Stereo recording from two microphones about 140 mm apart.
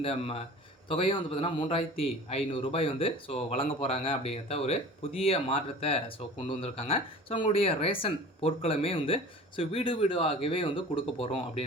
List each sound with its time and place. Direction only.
0.0 s a man's voice: 45° left (ahead or behind)